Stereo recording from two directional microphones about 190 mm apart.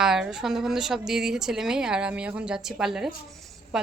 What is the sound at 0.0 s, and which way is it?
A woman's voice, 5° right (ahead or behind).